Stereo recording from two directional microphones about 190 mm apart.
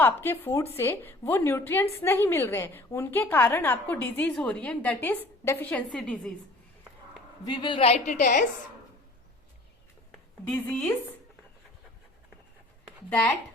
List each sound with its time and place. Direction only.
0.0 s a woman's voice: 10° left (ahead or behind)
7.4 s a woman's voice: 25° left (ahead or behind); by 8.4 s 45° left (ahead or behind)
10.4 s a woman's voice: 10° left (ahead or behind)